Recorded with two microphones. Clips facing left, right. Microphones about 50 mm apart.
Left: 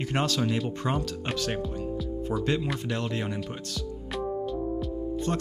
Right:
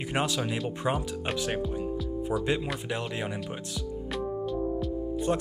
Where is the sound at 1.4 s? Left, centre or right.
Centre.